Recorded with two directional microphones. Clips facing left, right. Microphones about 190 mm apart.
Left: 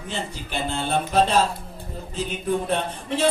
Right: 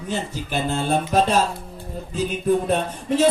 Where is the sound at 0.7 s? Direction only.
45° right (ahead or behind).